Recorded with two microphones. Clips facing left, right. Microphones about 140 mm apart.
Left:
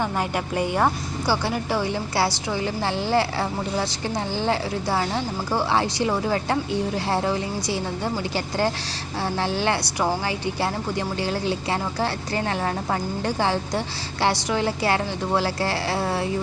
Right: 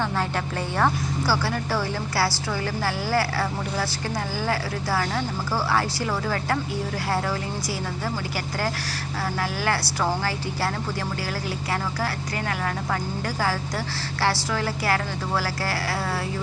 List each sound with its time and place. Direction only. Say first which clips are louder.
0.0 s speech: left 1 dB; 15° left (ahead or behind)
9.4 s speech: left 3 dB; 25° left (ahead or behind)